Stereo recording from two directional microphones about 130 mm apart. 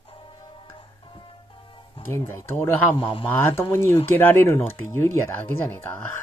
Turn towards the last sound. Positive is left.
turn(degrees=15)  # may be behind; listen again after turning